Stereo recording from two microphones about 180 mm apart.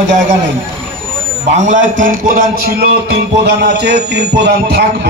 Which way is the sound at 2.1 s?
50° right (ahead or behind).